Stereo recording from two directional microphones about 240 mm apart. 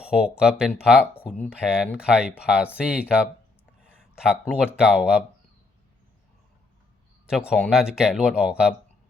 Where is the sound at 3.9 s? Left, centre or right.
Centre.